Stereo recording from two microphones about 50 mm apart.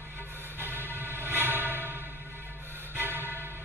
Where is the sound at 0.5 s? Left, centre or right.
Right.